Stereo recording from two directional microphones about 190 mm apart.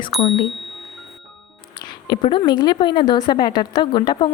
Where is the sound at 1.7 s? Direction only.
25° left (ahead or behind).